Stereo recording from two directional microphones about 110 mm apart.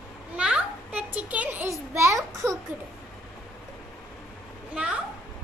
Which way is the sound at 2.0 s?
25° right (ahead or behind).